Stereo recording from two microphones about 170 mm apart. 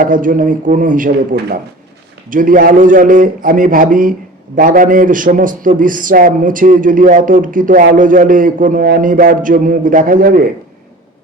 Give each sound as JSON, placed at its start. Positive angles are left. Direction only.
{"t": 0.0, "sound": "a man's voice", "side_deg": -50}